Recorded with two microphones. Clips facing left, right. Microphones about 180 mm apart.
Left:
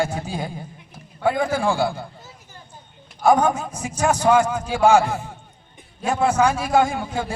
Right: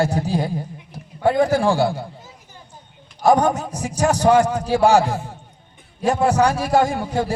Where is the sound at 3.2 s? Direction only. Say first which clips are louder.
Right 1 dB; 40° right (ahead or behind).